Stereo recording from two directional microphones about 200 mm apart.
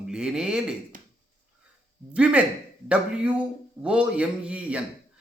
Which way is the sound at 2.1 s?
5° right (ahead or behind).